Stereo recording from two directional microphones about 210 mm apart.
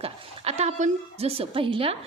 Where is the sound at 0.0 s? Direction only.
30° right (ahead or behind).